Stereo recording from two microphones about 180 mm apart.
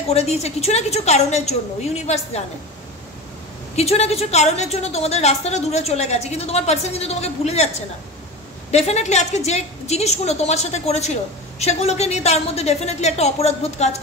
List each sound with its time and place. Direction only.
0.1 s a woman's voice: 35° left (ahead or behind)
3.7 s a woman's voice: 35° left (ahead or behind)